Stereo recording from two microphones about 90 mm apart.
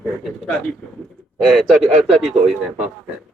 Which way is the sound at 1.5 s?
Centre (ahead or behind).